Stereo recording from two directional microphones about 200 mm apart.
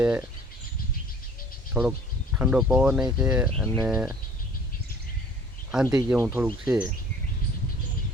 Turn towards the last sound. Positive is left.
turn(degrees=-5)  # may be behind; listen again after turning